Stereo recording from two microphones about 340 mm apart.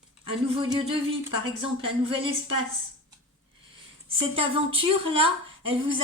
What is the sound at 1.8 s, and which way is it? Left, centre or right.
Speech, centre.